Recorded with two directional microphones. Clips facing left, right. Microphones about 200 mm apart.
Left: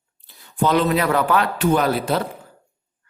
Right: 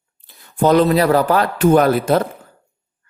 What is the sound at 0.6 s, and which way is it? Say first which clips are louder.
Speech: right 5 dB; 40° right (ahead or behind).